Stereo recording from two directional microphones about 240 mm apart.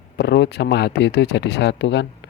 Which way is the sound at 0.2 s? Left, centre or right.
Left.